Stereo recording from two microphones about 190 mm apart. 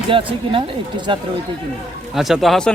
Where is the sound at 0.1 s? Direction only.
25° right (ahead or behind).